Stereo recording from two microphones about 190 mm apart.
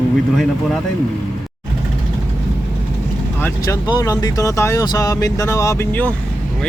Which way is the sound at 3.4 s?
15° left (ahead or behind).